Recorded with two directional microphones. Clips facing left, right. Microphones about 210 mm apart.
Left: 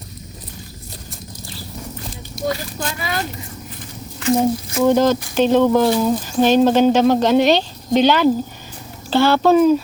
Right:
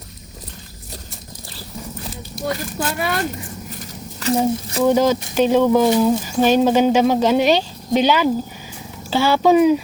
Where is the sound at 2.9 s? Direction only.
60° right (ahead or behind); by 4.3 s 40° right (ahead or behind).